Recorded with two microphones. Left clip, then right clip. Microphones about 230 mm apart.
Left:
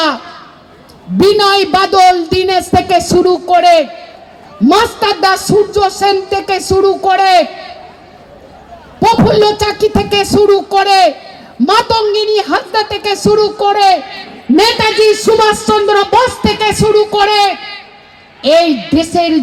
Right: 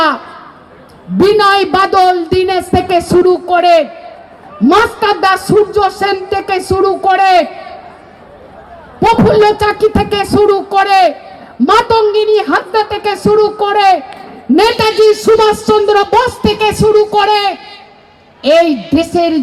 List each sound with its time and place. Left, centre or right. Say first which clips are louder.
1.2 s a man's voice: even; left
9.0 s speech: right 1 dB; left
18.9 s speech: even; left